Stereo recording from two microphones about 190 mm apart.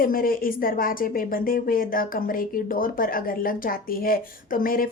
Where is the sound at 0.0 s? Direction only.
50° left (ahead or behind).